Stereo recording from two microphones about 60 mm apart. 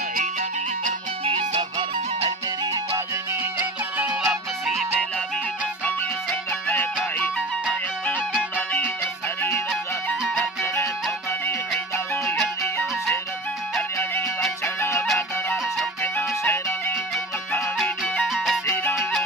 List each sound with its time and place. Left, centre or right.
8.5 s music: left
14.8 s music: left
16.0 s music: left
17.8 s music: left
18.2 s music: centre